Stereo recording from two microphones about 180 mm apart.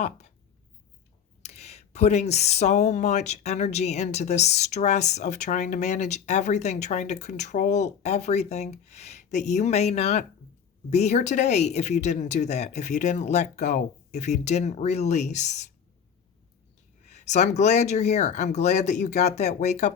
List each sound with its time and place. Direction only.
1.4 s speech: 40° left (ahead or behind)
17.1 s speech: 40° left (ahead or behind)